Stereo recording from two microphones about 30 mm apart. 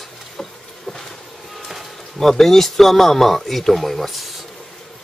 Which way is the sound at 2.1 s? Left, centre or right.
Centre.